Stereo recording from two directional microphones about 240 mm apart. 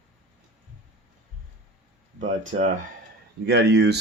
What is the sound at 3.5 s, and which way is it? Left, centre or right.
Speech, right.